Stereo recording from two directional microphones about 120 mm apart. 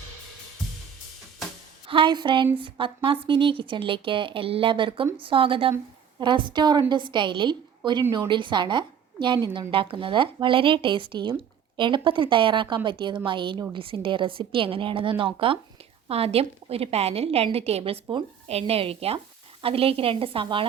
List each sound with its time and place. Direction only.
1.9 s a woman's voice: 40° right (ahead or behind)